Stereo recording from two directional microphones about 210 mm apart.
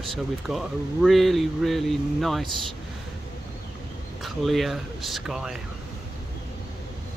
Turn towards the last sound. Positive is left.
turn(degrees=0)  # may be behind; listen again after turning